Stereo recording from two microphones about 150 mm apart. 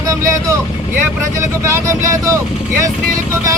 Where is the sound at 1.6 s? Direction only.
20° right (ahead or behind).